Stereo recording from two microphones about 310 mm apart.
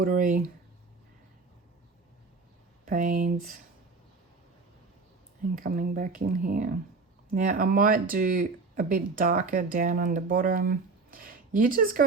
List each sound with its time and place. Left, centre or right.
0.0 s speech: right
2.8 s speech: right
5.6 s speech: right